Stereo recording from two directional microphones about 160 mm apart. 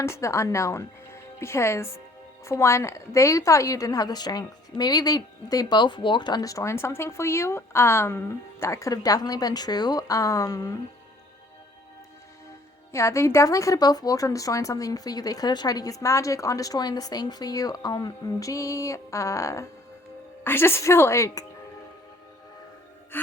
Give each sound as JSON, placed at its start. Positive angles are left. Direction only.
{"t": 0.0, "sound": "a woman's voice", "side_deg": 15}
{"t": 12.9, "sound": "a woman's voice", "side_deg": 20}
{"t": 23.1, "sound": "speech", "side_deg": 10}